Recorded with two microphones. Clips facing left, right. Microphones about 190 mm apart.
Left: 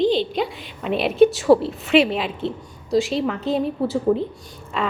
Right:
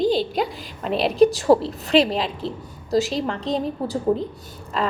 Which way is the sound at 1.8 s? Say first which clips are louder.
Left 1 dB; 35° right (ahead or behind).